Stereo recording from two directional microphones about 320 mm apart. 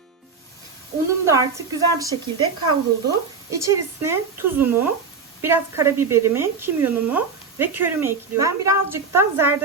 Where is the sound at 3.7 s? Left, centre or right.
Centre.